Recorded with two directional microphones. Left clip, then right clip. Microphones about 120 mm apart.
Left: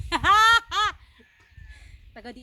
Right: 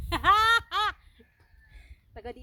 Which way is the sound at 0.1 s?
50° left (ahead or behind).